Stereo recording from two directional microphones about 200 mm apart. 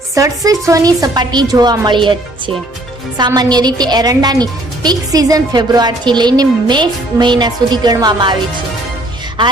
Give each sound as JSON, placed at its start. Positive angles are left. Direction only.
{"t": 0.1, "sound": "a woman's voice", "side_deg": -15}
{"t": 3.2, "sound": "a woman's voice", "side_deg": -20}